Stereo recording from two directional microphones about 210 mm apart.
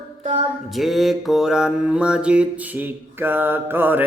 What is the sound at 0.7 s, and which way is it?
Mantra, centre (ahead or behind).